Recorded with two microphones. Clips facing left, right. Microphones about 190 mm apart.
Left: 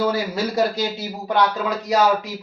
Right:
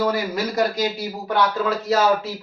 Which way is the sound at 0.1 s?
25° left (ahead or behind).